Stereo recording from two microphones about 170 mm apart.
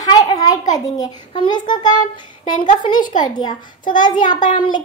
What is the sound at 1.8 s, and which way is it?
Child singing, 50° left (ahead or behind).